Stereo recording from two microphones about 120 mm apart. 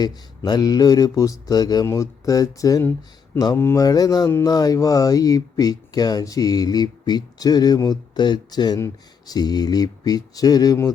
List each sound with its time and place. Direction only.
0.4 s speech: 35° left (ahead or behind)
3.6 s speech: 20° left (ahead or behind)
3.8 s speech: 30° left (ahead or behind)